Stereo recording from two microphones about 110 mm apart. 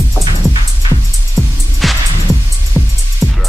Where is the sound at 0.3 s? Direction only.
40° right (ahead or behind).